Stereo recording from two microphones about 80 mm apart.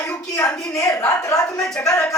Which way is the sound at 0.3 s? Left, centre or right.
Left.